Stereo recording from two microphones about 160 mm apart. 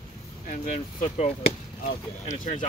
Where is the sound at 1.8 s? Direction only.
50° left (ahead or behind).